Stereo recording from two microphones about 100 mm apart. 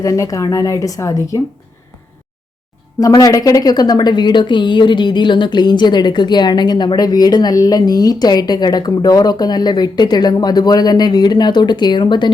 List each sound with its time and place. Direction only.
0.0 s speech: 35° left (ahead or behind)
3.0 s a woman's voice: 35° left (ahead or behind)